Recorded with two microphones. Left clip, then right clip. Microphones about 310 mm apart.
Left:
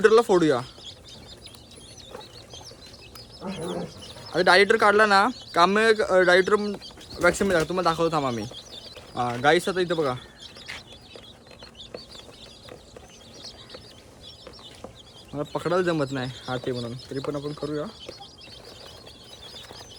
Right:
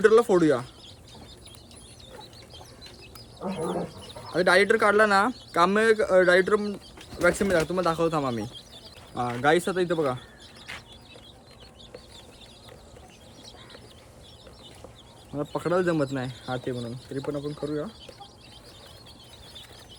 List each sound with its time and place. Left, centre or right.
0.0 s speech: centre
3.7 s bird: centre
4.3 s speech: centre
10.7 s a sound: centre
15.3 s speech: centre